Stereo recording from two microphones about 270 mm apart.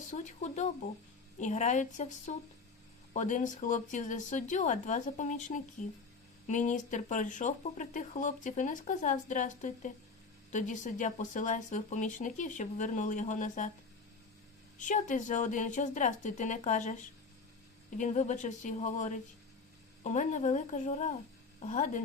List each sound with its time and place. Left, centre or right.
0.1 s speech: left
14.8 s speech: left